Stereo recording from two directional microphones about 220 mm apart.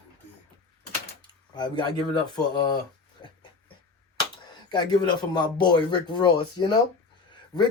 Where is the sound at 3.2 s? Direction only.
20° left (ahead or behind).